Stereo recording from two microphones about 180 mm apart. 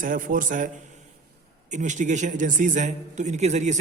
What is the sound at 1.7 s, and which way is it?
A man's voice, 40° right (ahead or behind).